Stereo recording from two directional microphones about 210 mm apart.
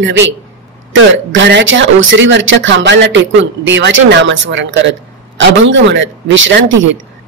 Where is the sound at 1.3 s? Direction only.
60° right (ahead or behind).